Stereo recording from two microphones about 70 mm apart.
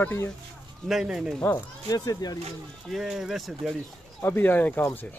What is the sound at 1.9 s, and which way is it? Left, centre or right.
Speech, left.